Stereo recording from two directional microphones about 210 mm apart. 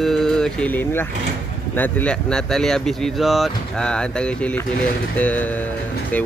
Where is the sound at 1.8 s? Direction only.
5° left (ahead or behind).